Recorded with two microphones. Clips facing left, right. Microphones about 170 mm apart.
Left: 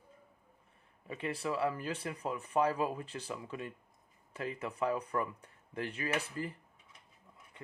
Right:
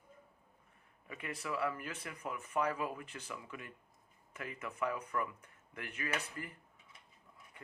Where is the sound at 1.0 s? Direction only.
30° left (ahead or behind).